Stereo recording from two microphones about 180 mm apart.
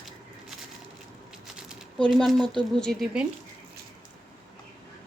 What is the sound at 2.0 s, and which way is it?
Speech, centre (ahead or behind).